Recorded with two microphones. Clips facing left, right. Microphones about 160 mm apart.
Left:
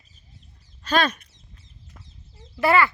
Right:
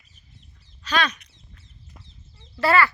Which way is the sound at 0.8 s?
50° left (ahead or behind).